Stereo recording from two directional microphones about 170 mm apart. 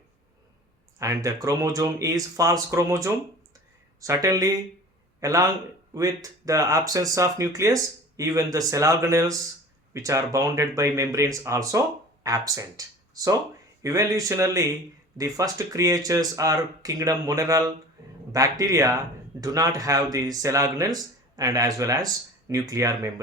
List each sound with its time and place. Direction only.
0.9 s speech: 20° right (ahead or behind)